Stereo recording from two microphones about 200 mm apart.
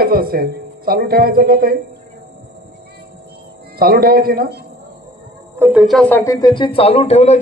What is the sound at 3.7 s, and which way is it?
Speech, 50° right (ahead or behind).